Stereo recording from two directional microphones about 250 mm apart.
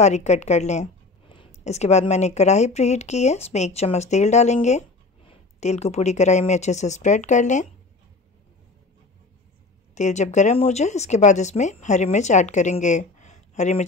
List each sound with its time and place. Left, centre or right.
0.0 s speech: left
9.9 s speech: left